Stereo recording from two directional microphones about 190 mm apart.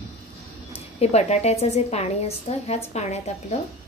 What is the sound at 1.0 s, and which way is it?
A woman's voice, 35° left (ahead or behind).